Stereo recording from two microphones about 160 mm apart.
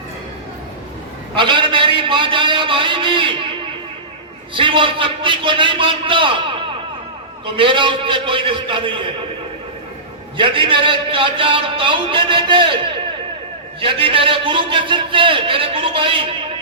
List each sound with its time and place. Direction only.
1.4 s a man's voice: 30° right (ahead or behind)
4.5 s a man's voice: 30° right (ahead or behind)
7.5 s a man's voice: 30° right (ahead or behind)
10.3 s a man's voice: 30° right (ahead or behind)